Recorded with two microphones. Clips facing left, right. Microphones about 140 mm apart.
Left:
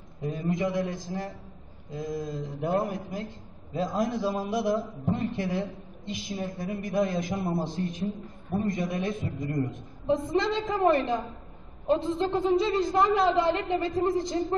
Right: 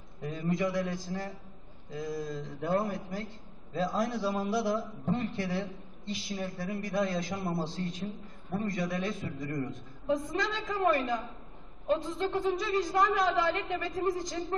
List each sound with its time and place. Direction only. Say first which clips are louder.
0.2 s a man's voice: left 3 dB; 25° left (ahead or behind)